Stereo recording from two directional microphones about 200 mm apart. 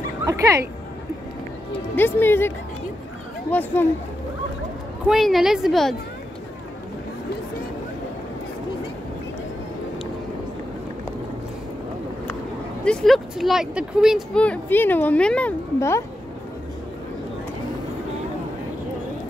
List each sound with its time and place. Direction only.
0.2 s speech: 15° right (ahead or behind)
2.0 s speech: 10° left (ahead or behind)
5.0 s speech: centre (ahead or behind)
12.8 s speech: 5° left (ahead or behind)